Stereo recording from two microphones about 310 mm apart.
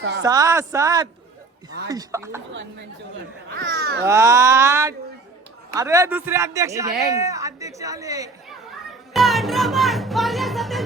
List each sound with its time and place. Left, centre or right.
0.2 s a man's voice: centre
2.5 s speech: right
4.0 s a man's voice: centre
9.1 s music: centre